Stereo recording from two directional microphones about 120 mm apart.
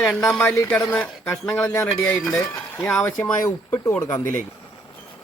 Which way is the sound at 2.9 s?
10° left (ahead or behind).